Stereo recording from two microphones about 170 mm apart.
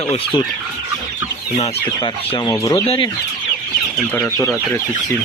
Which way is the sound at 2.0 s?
25° left (ahead or behind).